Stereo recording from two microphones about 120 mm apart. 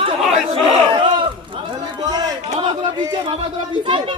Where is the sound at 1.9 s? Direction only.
35° right (ahead or behind).